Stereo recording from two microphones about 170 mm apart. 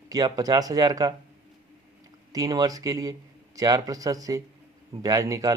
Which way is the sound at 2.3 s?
20° right (ahead or behind).